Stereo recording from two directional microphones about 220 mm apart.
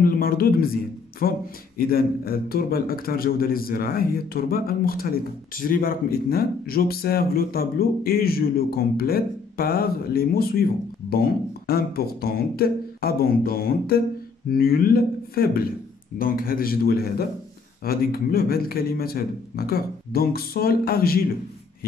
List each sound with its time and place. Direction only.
0.0 s a man's voice: 40° left (ahead or behind)